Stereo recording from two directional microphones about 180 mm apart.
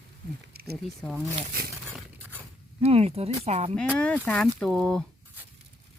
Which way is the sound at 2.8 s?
35° right (ahead or behind).